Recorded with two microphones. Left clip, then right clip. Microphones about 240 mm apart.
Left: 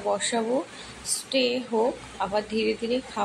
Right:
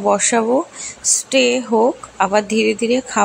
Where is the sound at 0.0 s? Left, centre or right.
Right.